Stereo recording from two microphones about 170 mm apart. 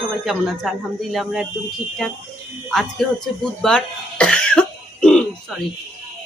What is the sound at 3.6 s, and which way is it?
Cough, 5° left (ahead or behind).